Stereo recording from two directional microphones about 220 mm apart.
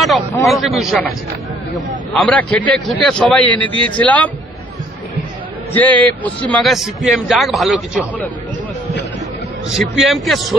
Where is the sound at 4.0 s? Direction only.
5° left (ahead or behind).